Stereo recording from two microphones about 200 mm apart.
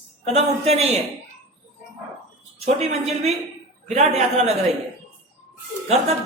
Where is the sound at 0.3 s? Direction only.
30° right (ahead or behind).